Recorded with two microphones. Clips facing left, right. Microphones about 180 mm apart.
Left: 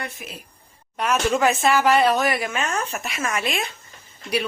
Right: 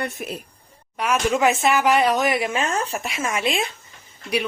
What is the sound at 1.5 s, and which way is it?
A woman's voice, 20° right (ahead or behind).